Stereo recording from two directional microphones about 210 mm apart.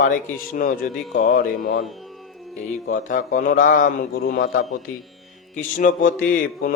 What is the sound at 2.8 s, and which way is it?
Mantra, 40° left (ahead or behind).